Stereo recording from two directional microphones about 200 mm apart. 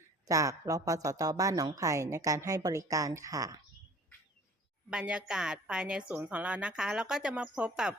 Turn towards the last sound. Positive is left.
turn(degrees=-5)  # may be behind; listen again after turning